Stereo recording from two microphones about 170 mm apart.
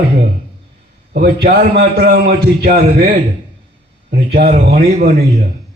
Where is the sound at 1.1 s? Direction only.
65° right (ahead or behind).